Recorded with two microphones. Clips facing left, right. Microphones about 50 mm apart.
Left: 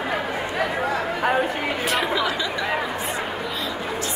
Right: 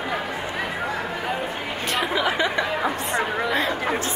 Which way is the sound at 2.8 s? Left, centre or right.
Right.